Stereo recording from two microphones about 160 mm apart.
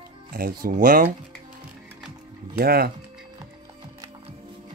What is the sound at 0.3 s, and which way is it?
Speech, 65° right (ahead or behind).